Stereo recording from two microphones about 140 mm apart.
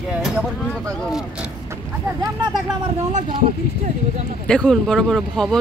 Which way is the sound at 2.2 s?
30° right (ahead or behind).